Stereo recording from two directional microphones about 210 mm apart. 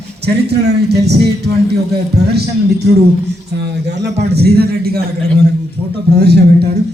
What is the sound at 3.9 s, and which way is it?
Speech, 55° right (ahead or behind).